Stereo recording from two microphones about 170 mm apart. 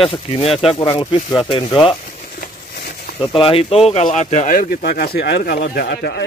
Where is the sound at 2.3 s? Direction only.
65° left (ahead or behind).